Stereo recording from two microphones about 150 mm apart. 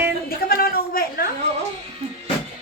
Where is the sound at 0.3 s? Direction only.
80° left.